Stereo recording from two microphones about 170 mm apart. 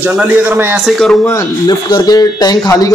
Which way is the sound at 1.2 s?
20° left (ahead or behind).